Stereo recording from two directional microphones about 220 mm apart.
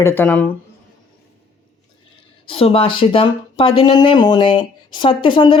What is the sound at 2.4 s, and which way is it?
Speech, 25° left (ahead or behind).